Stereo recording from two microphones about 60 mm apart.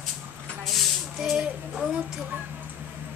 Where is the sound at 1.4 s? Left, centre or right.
Centre.